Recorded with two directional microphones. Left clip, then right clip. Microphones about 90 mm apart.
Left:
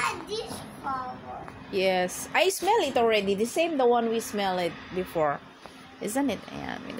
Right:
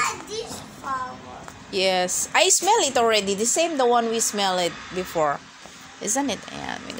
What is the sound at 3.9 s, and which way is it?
Speech, 15° right (ahead or behind).